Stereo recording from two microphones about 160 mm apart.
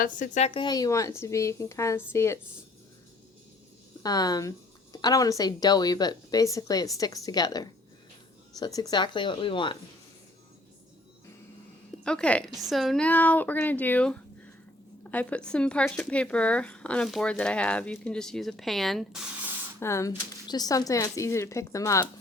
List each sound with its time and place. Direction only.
0.0 s a woman's voice: 50° left (ahead or behind)
0.6 s speech: 25° left (ahead or behind)
4.0 s speech: 25° left (ahead or behind)
12.0 s speech: 5° left (ahead or behind)
19.8 s speech: 20° left (ahead or behind)